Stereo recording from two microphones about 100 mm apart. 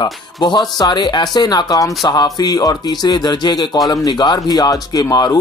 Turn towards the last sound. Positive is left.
turn(degrees=40)  # may be behind; listen again after turning